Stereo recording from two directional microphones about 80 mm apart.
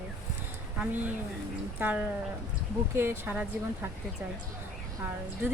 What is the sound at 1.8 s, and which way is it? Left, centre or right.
Speech, centre.